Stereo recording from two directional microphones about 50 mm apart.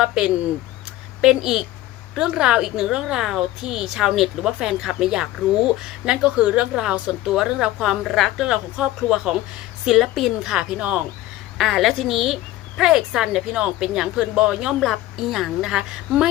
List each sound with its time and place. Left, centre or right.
0.0 s a woman's voice: centre
8.0 s a woman's voice: centre
9.0 s a woman's voice: centre
10.5 s speech: centre
11.5 s a woman's voice: centre
14.8 s a woman's voice: centre